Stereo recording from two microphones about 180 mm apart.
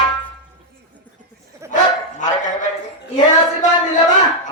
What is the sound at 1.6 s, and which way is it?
Bow-wow, 15° right (ahead or behind).